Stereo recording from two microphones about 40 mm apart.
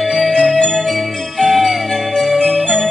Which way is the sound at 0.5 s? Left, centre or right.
Centre.